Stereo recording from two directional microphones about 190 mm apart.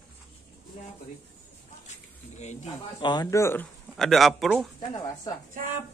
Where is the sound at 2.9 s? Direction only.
25° left (ahead or behind); by 4.7 s centre (ahead or behind).